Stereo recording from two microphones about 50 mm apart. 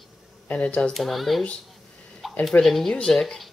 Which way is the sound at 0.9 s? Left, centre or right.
Centre.